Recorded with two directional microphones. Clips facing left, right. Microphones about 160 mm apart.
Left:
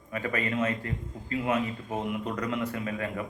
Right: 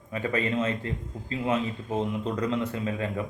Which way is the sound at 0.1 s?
25° right (ahead or behind).